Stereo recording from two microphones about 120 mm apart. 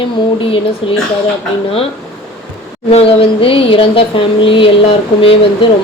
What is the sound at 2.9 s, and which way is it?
Speech, 55° left (ahead or behind).